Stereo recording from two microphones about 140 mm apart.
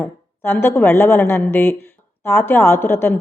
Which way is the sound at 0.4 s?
15° left (ahead or behind).